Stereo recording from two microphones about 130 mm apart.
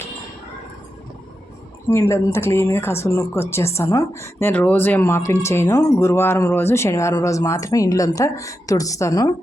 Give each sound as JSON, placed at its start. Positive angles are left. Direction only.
{"t": 1.9, "sound": "speech", "side_deg": 20}